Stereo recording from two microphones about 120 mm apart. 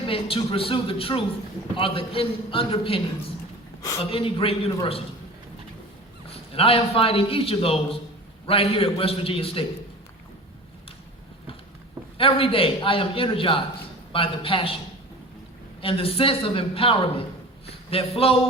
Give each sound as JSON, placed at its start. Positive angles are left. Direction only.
{"t": 0.1, "sound": "a man's voice", "side_deg": 50}
{"t": 4.0, "sound": "a man's voice", "side_deg": 50}
{"t": 6.5, "sound": "a man's voice", "side_deg": 50}
{"t": 12.1, "sound": "a man's voice", "side_deg": 50}
{"t": 15.8, "sound": "a man's voice", "side_deg": 50}